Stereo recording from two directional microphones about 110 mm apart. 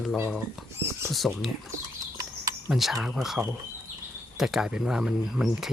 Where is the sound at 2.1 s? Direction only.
30° right (ahead or behind).